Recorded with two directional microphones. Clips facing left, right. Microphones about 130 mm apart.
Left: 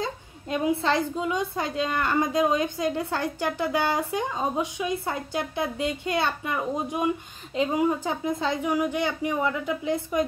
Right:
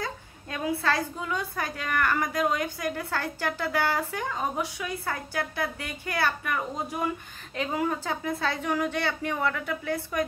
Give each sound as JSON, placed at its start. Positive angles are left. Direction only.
{"t": 0.0, "sound": "a woman's voice", "side_deg": 20}